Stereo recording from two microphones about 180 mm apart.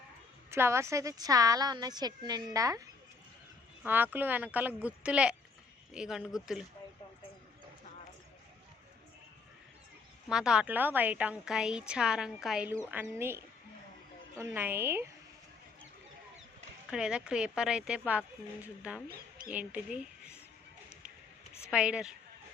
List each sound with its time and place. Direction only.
0.5 s a woman's voice: 15° right (ahead or behind)
3.8 s a woman's voice: 10° right (ahead or behind)
10.2 s a woman's voice: 5° right (ahead or behind)
16.9 s a woman's voice: 5° right (ahead or behind)
21.7 s a woman's voice: 5° right (ahead or behind)